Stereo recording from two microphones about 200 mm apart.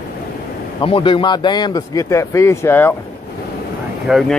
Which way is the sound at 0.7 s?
25° left (ahead or behind).